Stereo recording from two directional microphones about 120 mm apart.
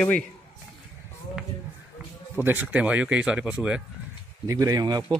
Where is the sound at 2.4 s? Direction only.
15° right (ahead or behind).